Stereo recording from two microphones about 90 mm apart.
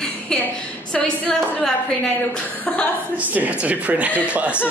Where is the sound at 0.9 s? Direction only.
10° left (ahead or behind).